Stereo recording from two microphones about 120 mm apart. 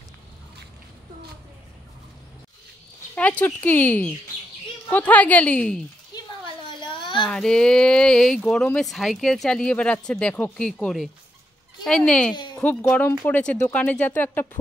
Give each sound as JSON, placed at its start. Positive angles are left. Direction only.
{"t": 3.2, "sound": "speech", "side_deg": 10}
{"t": 6.8, "sound": "a sound", "side_deg": 40}
{"t": 7.2, "sound": "speech", "side_deg": 5}